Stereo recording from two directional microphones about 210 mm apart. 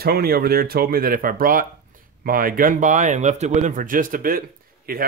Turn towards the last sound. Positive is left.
turn(degrees=-45)  # may be behind; listen again after turning